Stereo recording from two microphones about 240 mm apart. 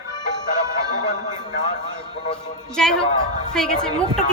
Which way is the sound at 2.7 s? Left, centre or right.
Centre.